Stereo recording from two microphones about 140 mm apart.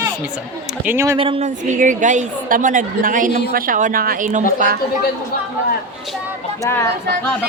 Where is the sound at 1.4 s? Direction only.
60° right (ahead or behind).